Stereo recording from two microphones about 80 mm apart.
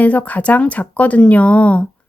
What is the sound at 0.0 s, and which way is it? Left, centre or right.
Speech, centre.